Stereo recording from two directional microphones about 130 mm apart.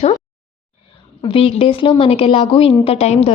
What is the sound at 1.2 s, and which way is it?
A woman's voice, 45° left (ahead or behind).